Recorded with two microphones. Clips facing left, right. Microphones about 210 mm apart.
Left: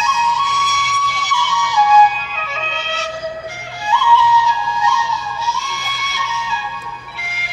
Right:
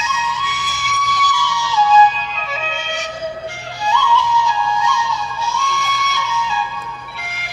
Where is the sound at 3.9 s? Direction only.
50° right (ahead or behind).